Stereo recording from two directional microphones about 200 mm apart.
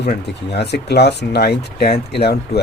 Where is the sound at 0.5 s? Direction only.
55° left (ahead or behind).